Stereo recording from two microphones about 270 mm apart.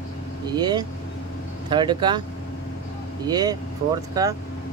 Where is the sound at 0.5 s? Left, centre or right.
Centre.